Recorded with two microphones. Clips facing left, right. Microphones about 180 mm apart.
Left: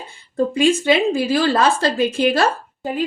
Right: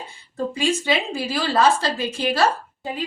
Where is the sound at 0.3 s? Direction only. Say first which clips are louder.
Left 6 dB; 50° left (ahead or behind).